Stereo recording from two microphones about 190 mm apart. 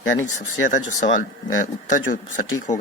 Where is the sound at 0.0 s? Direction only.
90° left.